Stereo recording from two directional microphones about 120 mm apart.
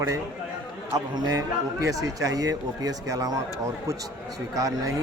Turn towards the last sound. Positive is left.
turn(degrees=-30)  # may be behind; listen again after turning